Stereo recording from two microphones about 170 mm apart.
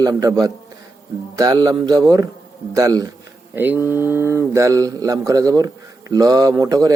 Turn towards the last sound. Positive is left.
turn(degrees=-20)  # may be behind; listen again after turning